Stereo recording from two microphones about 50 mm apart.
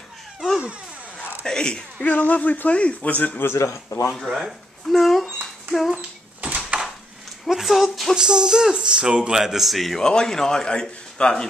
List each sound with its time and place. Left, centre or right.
1.4 s a man's voice: centre
2.0 s speech: left
3.5 s speech: left
4.1 s a sound: centre
5.9 s dog: right
7.4 s a woman's voice: centre
8.2 s speech: centre
9.9 s a man's voice: centre